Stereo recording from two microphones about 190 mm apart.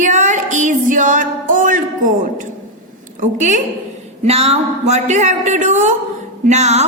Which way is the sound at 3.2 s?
40° right (ahead or behind).